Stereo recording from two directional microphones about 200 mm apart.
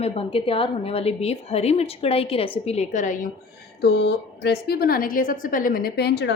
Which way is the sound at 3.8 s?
55° left (ahead or behind).